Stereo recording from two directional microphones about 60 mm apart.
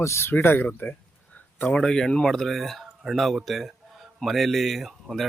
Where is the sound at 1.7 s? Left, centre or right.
Centre.